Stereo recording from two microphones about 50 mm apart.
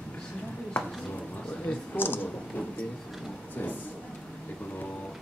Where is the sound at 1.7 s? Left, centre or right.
Left.